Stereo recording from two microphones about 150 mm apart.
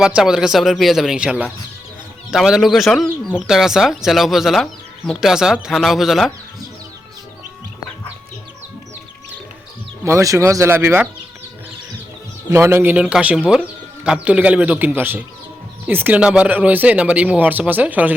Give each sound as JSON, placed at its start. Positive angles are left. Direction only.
{"t": 0.0, "sound": "speech", "side_deg": -5}
{"t": 10.0, "sound": "speech", "side_deg": -20}
{"t": 12.5, "sound": "speech", "side_deg": -15}